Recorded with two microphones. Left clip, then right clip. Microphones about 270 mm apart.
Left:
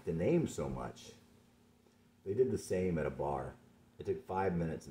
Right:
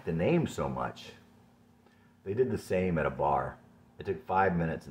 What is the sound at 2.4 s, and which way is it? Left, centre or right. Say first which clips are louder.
Speech: right 4 dB; right.